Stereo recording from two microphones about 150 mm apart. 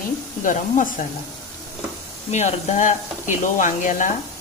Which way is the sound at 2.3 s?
50° left (ahead or behind).